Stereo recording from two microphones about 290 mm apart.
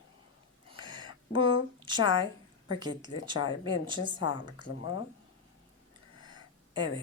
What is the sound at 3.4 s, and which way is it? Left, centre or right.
Speech, left.